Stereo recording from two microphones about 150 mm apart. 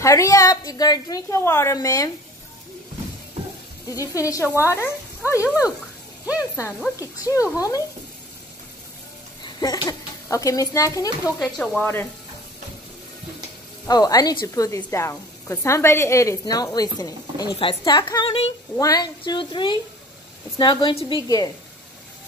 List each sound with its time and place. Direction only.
0.0 s a woman's voice: 20° left (ahead or behind)
3.8 s a woman's voice: 20° left (ahead or behind)
7.0 s a woman's voice: 20° left (ahead or behind)
9.4 s speech: 25° left (ahead or behind)
11.4 s speech: 5° left (ahead or behind)
11.8 s speech: 15° left (ahead or behind)
13.8 s a woman's voice: 25° left (ahead or behind)